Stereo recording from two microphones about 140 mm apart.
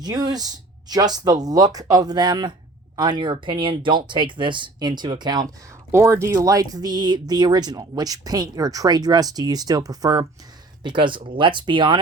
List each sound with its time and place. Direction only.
0.0 s speech: 30° right (ahead or behind)
5.9 s speech: 20° right (ahead or behind); by 11.9 s 35° right (ahead or behind)